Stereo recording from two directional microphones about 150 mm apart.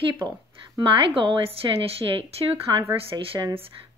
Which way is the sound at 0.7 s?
35° right (ahead or behind).